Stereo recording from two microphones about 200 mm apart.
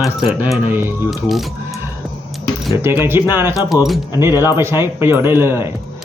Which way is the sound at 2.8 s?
10° right (ahead or behind).